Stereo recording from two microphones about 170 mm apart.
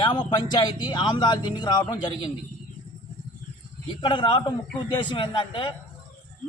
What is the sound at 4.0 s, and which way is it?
A man's voice, 25° left (ahead or behind).